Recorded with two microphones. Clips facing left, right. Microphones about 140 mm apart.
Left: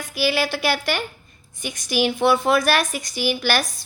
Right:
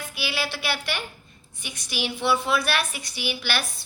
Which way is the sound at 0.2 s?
45° left (ahead or behind).